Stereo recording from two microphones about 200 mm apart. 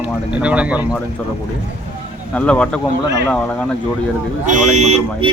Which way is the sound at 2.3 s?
5° left (ahead or behind).